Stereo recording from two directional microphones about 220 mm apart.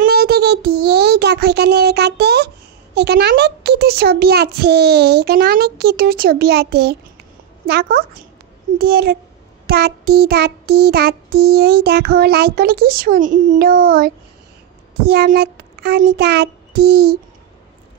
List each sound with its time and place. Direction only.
0.0 s child singing: 45° right (ahead or behind)
15.0 s speech: 45° right (ahead or behind)
16.2 s child singing: 45° right (ahead or behind)